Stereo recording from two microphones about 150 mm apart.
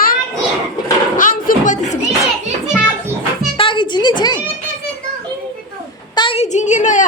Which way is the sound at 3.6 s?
35° left (ahead or behind).